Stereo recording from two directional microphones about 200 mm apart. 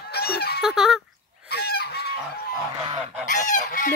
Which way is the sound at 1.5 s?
50° left (ahead or behind).